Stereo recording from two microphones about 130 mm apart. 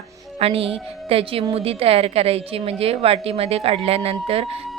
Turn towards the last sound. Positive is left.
turn(degrees=-45)  # may be behind; listen again after turning